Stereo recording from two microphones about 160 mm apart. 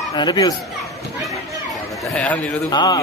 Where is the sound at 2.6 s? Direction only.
25° left (ahead or behind).